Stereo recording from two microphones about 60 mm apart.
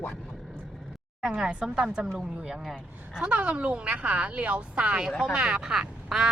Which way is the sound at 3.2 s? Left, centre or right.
Right.